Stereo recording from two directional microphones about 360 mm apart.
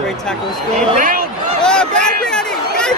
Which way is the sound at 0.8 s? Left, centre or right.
Right.